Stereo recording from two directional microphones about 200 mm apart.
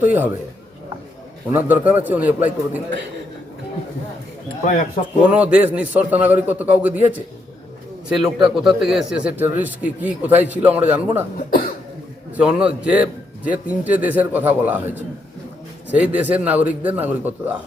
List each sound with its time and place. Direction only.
0.0 s speech: 10° right (ahead or behind)
1.5 s speech: 10° right (ahead or behind)
4.6 s speech: 40° left (ahead or behind)
5.2 s speech: 5° right (ahead or behind)
8.4 s speech: centre (ahead or behind)
12.4 s speech: 5° right (ahead or behind)